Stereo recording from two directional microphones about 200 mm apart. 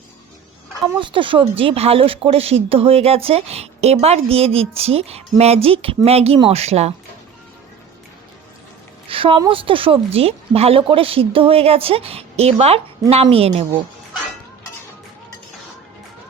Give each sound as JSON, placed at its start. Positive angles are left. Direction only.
{"t": 0.9, "sound": "a woman's voice", "side_deg": -25}
{"t": 9.0, "sound": "speech", "side_deg": -25}